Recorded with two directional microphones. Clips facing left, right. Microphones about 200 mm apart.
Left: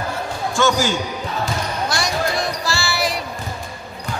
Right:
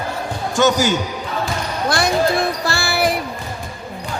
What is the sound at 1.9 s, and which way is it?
Music, 55° right (ahead or behind).